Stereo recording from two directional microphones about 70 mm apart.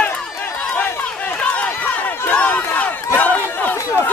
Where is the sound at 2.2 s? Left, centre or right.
Left.